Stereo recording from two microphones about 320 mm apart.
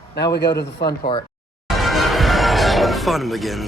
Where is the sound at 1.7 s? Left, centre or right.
Centre.